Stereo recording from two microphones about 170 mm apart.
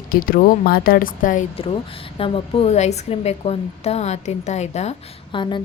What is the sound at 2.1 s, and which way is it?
A woman's voice, 30° left (ahead or behind).